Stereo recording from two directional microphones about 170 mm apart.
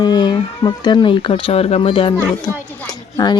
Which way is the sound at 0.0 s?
25° left (ahead or behind).